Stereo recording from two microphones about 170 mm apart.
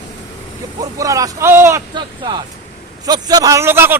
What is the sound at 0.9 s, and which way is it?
Speech, 20° right (ahead or behind).